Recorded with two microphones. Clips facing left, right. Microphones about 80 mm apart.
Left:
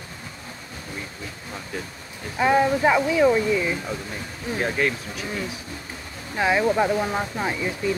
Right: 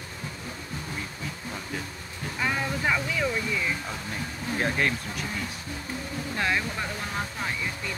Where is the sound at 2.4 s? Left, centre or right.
Left.